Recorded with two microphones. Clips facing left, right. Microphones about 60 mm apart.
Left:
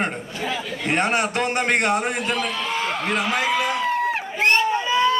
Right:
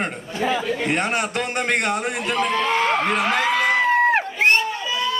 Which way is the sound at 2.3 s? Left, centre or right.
Right.